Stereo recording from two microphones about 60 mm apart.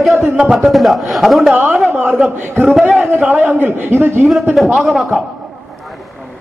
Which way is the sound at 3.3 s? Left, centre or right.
Right.